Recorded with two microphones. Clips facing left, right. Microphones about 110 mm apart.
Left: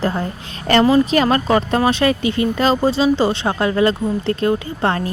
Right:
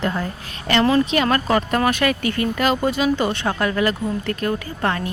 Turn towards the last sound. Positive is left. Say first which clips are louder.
# left 3 dB
turn(degrees=30)  # may be behind; listen again after turning